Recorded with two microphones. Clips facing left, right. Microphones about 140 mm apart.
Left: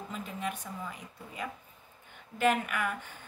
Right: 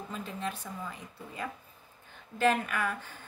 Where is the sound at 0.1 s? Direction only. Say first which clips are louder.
Even; 15° left (ahead or behind).